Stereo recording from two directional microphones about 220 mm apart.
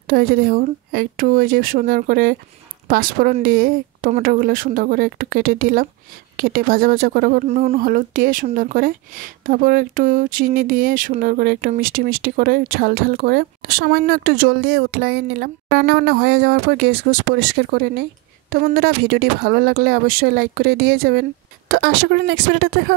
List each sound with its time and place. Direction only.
0.0 s speech: 40° right (ahead or behind)